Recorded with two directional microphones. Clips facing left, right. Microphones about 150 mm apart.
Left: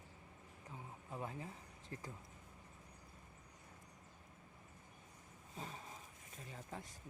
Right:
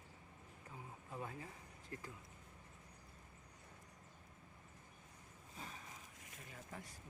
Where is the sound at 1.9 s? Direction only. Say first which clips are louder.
Left 1 dB; 30° left (ahead or behind).